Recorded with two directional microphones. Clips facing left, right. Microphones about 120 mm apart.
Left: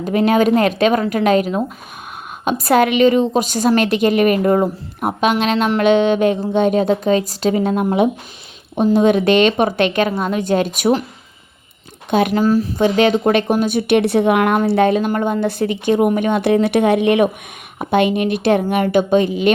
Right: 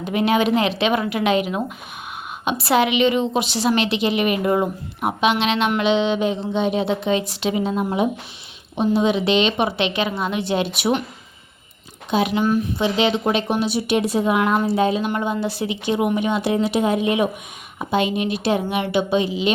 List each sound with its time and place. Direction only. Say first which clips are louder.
0.0 s speech: left 4 dB; 40° left (ahead or behind)
4.6 s speech: left 3 dB; 5° left (ahead or behind)
5.2 s speech: left 3 dB; 45° left (ahead or behind); by 8.0 s 60° left (ahead or behind)
8.7 s speech: left 5 dB; 50° left (ahead or behind)
12.1 s speech: left 4 dB; 55° left (ahead or behind)
12.4 s speech: left 5 dB; 35° left (ahead or behind); by 15.0 s 60° left (ahead or behind)
15.0 s speech: left 5 dB; 45° left (ahead or behind); by 17.2 s 65° left (ahead or behind)
17.7 s speech: left 5 dB; 55° left (ahead or behind)